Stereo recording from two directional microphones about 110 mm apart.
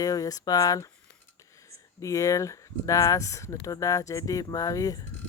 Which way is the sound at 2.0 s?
30° left (ahead or behind).